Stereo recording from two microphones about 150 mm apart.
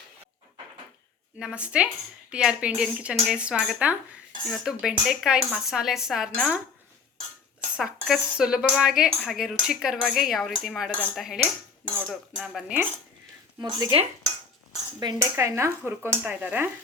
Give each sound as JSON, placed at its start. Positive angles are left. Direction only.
{"t": 1.4, "sound": "speech", "side_deg": -5}
{"t": 7.8, "sound": "speech", "side_deg": 0}
{"t": 13.6, "sound": "speech", "side_deg": -25}
{"t": 14.9, "sound": "speech", "side_deg": -20}